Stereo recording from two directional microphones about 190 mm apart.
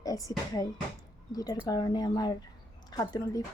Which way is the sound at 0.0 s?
20° left (ahead or behind).